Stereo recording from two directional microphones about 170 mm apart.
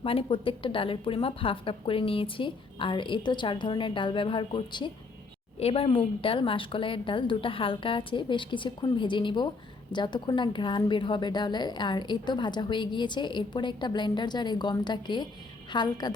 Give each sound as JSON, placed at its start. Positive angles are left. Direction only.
{"t": 0.0, "sound": "a woman's voice", "side_deg": 35}